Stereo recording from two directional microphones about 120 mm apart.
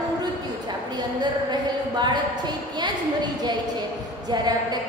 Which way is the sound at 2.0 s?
40° right (ahead or behind).